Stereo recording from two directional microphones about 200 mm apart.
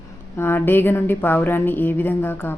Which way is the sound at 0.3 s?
10° left (ahead or behind).